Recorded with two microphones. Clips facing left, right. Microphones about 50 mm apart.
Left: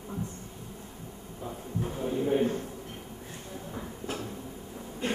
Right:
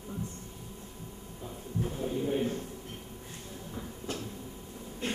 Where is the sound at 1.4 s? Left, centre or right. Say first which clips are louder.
Left 1 dB; centre.